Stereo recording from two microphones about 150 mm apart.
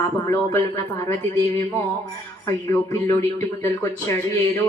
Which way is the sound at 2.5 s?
20° left (ahead or behind).